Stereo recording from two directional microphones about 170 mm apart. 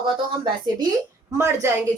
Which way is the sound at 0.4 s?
25° right (ahead or behind).